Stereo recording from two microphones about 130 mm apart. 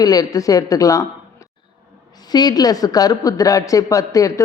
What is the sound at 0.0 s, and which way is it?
A woman's voice, 30° left (ahead or behind).